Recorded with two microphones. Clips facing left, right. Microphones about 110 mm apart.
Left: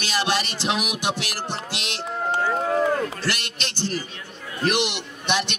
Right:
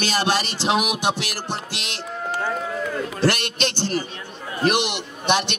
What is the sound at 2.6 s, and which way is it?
Run, 45° left (ahead or behind).